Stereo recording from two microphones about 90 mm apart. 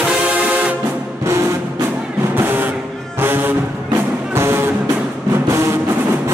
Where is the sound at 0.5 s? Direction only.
15° right (ahead or behind).